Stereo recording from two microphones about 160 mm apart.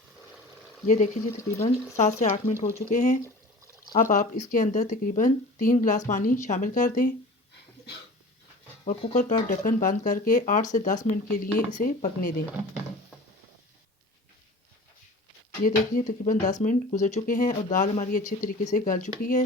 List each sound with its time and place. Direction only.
0.9 s speech: 50° left (ahead or behind)
8.8 s speech: 50° left (ahead or behind)
15.6 s speech: 55° left (ahead or behind)